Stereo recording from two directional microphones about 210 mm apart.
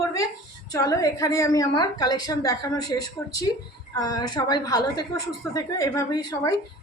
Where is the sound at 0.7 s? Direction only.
15° left (ahead or behind).